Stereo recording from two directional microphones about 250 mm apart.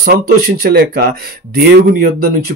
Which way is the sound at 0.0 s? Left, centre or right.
Right.